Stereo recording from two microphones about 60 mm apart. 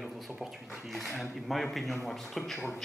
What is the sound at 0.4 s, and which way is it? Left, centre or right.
Speech, centre.